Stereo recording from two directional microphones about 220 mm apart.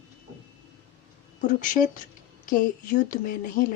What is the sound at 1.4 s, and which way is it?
Speech, 35° left (ahead or behind).